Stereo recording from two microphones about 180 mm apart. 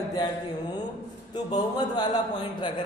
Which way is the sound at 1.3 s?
25° left (ahead or behind).